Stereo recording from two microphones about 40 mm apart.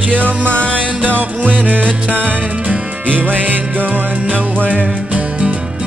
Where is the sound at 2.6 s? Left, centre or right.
Right.